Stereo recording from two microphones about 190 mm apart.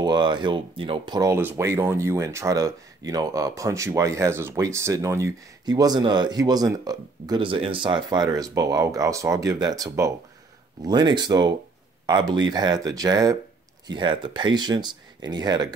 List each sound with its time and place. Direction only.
0.0 s speech: 25° right (ahead or behind)